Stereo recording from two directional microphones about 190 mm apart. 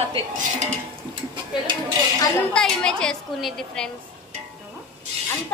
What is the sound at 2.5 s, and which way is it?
A woman's voice, 5° left (ahead or behind).